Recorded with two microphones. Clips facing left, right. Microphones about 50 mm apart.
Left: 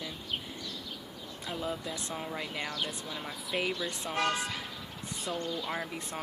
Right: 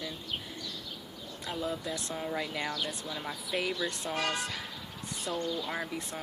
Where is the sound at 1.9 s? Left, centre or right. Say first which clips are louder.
Right 1 dB; left.